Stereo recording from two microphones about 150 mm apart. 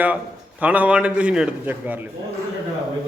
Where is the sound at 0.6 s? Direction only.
10° right (ahead or behind).